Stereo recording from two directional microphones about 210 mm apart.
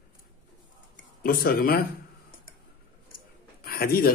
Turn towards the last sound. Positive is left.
turn(degrees=45)  # may be behind; listen again after turning